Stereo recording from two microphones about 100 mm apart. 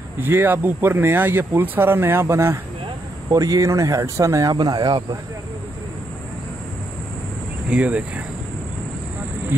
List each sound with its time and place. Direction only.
0.2 s speech: 20° right (ahead or behind); by 4.9 s 45° right (ahead or behind)
7.7 s speech: 15° right (ahead or behind)